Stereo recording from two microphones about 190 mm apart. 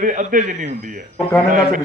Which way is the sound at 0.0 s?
45° right (ahead or behind).